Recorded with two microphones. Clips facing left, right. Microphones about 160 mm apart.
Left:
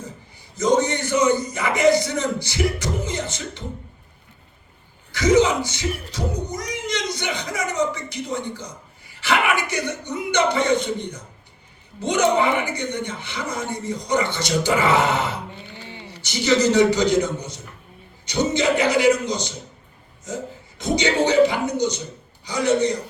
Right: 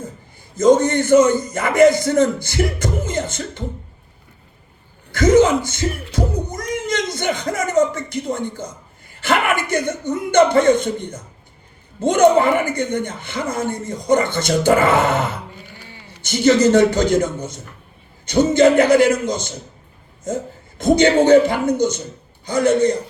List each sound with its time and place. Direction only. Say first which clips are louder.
0.5 s speech: right 6 dB; 50° right (ahead or behind)
5.1 s speech: right 4 dB; 50° right (ahead or behind)